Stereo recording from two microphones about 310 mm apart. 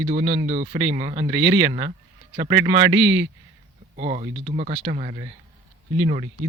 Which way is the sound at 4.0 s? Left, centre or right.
Centre.